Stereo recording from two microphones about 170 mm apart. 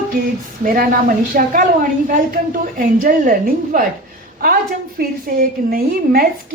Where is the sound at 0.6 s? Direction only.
55° right (ahead or behind).